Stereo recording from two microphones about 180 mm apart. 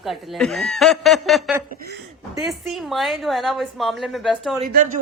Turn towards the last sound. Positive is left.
turn(degrees=-50)  # may be behind; listen again after turning